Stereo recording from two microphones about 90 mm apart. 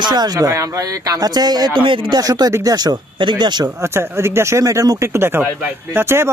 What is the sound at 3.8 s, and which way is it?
Speech, 30° right (ahead or behind).